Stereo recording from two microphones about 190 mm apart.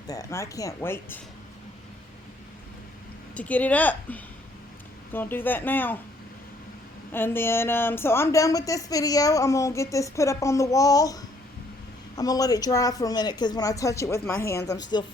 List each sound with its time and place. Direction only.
0.1 s speech: 15° left (ahead or behind)
3.3 s speech: 10° left (ahead or behind)
7.1 s speech: 10° left (ahead or behind)